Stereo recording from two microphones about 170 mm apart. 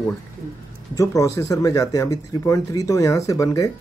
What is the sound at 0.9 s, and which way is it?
Speech, 20° left (ahead or behind).